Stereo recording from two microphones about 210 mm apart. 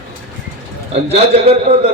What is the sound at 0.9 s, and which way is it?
Speech, 30° right (ahead or behind).